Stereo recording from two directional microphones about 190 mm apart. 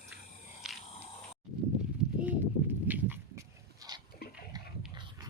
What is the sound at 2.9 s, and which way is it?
Dog, 10° right (ahead or behind).